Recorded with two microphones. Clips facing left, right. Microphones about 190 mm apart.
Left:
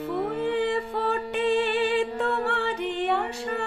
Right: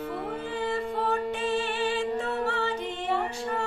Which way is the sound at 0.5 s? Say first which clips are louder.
Left 3 dB; 65° left (ahead or behind).